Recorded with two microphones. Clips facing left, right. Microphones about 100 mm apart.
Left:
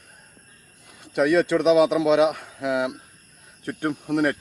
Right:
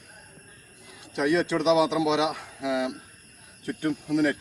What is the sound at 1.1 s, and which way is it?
Speech, 60° left (ahead or behind).